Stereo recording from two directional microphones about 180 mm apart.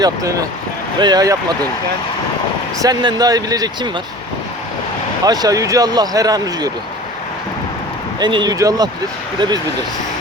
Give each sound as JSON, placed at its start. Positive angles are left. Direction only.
{"t": 0.0, "sound": "speech", "side_deg": -20}
{"t": 2.8, "sound": "speech", "side_deg": -25}
{"t": 5.2, "sound": "speech", "side_deg": -20}
{"t": 8.2, "sound": "speech", "side_deg": -25}